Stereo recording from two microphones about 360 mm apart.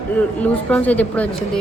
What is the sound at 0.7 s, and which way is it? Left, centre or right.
Speech, centre.